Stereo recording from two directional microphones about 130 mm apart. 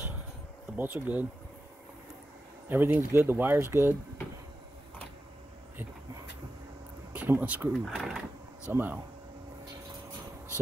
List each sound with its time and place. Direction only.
0.7 s speech: 15° right (ahead or behind)
2.7 s speech: 15° right (ahead or behind)
7.1 s speech: 15° right (ahead or behind)
7.7 s speech: centre (ahead or behind)
8.6 s speech: 15° right (ahead or behind)